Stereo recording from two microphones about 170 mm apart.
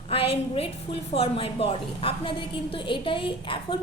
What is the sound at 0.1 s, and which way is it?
A woman's voice, 35° left (ahead or behind).